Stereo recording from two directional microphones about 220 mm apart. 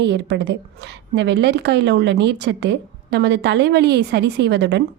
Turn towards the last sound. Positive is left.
turn(degrees=-50)  # may be behind; listen again after turning